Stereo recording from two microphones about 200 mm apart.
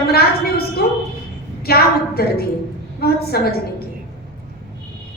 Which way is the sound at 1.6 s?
50° left (ahead or behind).